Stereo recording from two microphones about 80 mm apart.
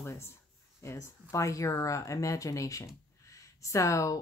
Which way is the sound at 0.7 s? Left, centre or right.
Left.